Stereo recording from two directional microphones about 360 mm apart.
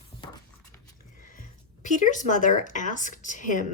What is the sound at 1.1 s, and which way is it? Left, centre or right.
Speech, left.